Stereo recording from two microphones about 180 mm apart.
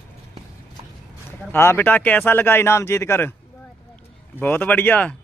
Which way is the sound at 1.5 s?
10° left (ahead or behind).